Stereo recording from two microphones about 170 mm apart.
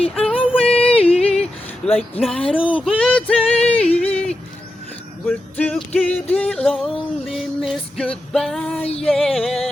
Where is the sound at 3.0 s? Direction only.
5° left (ahead or behind).